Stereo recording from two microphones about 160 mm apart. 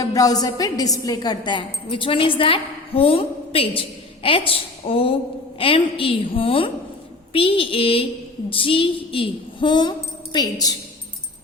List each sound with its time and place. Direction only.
0.0 s a woman's voice: 20° left (ahead or behind)